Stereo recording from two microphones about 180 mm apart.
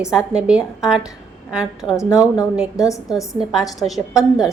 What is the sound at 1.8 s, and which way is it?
Speech, 20° left (ahead or behind).